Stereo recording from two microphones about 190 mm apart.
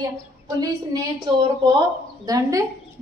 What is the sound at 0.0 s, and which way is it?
A woman's voice, 20° right (ahead or behind).